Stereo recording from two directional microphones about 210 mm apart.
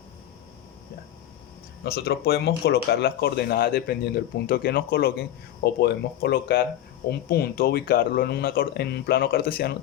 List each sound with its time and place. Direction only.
1.8 s speech: 50° left (ahead or behind)